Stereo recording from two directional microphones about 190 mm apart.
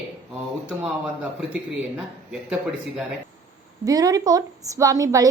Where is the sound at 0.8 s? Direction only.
5° right (ahead or behind).